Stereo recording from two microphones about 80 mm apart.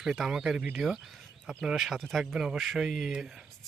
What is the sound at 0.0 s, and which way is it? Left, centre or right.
Speech, centre.